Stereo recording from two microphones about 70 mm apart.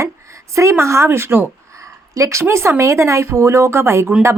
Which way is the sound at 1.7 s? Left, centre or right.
Right.